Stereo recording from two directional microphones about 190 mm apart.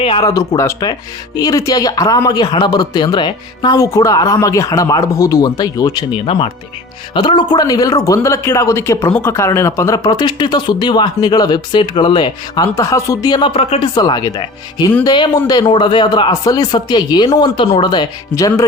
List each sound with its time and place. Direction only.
0.0 s a man's voice: 30° left (ahead or behind)
0.3 s a man's voice: 15° left (ahead or behind); by 13.9 s 35° left (ahead or behind)
13.9 s a man's voice: 20° left (ahead or behind)